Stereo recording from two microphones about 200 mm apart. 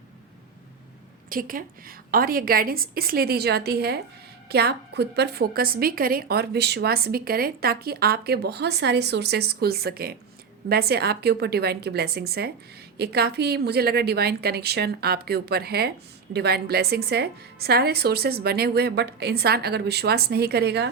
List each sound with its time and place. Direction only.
1.3 s a woman's voice: 45° right (ahead or behind)